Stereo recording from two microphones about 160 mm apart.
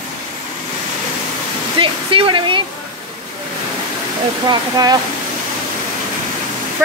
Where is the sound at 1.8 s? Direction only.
35° right (ahead or behind).